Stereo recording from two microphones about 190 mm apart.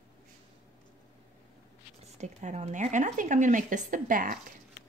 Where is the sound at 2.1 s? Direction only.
35° right (ahead or behind).